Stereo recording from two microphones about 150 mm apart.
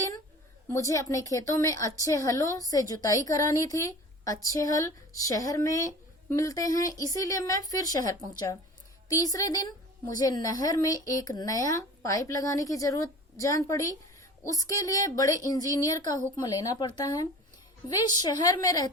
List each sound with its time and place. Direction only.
0.7 s a woman's voice: 20° left (ahead or behind)
9.0 s a woman's voice: 25° left (ahead or behind)